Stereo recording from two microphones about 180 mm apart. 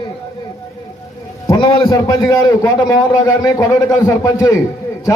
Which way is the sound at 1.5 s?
25° left (ahead or behind).